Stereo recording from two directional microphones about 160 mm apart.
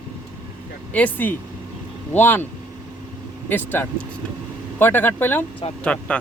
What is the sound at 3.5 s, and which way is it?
Speech, 10° left (ahead or behind).